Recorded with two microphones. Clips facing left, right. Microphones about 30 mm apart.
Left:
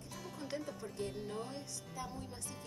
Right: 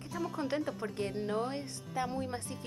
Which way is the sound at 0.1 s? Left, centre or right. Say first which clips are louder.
Right 10 dB; right.